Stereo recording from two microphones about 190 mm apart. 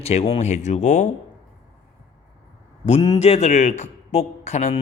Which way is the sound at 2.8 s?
35° left (ahead or behind).